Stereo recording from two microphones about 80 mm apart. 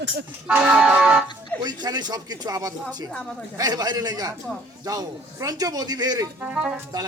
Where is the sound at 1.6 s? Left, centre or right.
Right.